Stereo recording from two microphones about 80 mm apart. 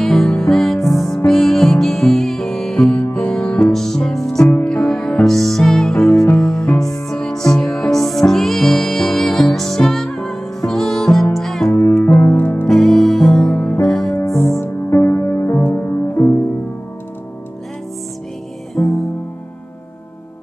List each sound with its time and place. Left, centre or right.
0.0 s music: centre
3.0 s music: centre
4.5 s music: centre
12.2 s music: left
12.6 s music: centre
14.2 s music: left
18.8 s music: left